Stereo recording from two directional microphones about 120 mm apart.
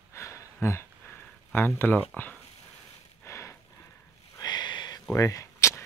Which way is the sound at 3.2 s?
25° left (ahead or behind).